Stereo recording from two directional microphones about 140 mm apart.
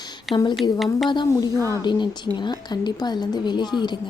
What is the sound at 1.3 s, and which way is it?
A woman's voice, 20° left (ahead or behind).